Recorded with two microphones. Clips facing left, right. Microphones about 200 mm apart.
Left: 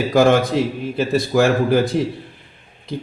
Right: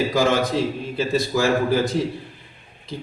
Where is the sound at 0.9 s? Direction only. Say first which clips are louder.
Left 5 dB; 60° left (ahead or behind).